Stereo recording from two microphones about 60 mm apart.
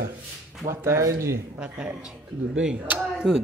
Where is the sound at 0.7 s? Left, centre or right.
Right.